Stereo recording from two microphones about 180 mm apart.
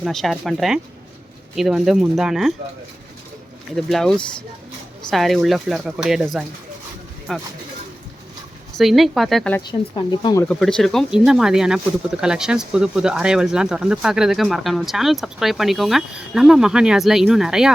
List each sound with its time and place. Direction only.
0.0 s speech: centre (ahead or behind)
3.8 s speech: centre (ahead or behind)
8.7 s speech: centre (ahead or behind)
9.6 s speech: 25° left (ahead or behind)
10.4 s speech: 5° left (ahead or behind)